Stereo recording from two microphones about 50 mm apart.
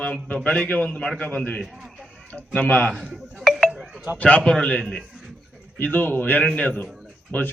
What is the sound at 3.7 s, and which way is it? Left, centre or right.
Wind chime, centre.